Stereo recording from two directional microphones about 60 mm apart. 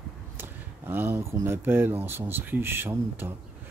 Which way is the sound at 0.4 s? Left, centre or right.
Right.